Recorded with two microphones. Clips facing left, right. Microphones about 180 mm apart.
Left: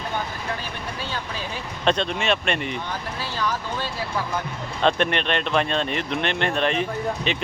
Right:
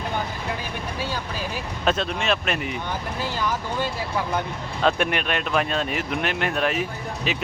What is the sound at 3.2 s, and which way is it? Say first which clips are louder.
Speech: even; 15° right (ahead or behind).